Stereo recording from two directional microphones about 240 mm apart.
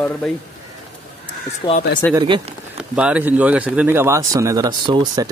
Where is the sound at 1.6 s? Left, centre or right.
Centre.